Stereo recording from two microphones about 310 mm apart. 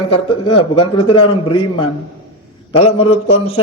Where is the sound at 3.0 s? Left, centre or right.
Centre.